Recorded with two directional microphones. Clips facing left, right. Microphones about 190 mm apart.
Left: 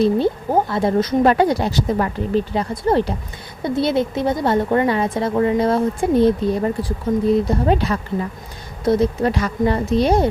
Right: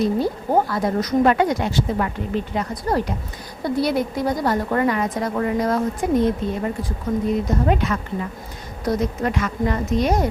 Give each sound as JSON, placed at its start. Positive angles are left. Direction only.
{"t": 0.7, "sound": "a woman's voice", "side_deg": 25}